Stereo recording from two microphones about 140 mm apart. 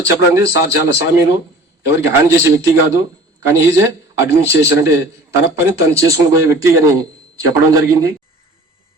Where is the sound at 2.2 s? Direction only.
20° right (ahead or behind).